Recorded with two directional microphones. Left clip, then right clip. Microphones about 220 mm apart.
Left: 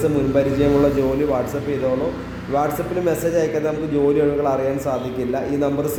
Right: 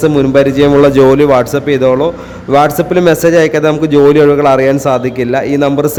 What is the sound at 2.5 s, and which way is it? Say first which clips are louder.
A man's voice: right 12 dB; 40° right (ahead or behind).